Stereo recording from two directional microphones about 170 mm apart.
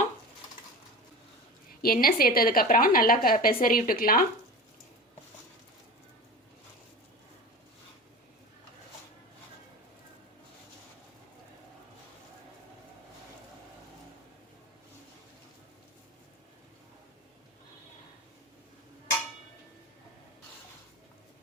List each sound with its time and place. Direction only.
1.8 s a woman's voice: 60° left (ahead or behind)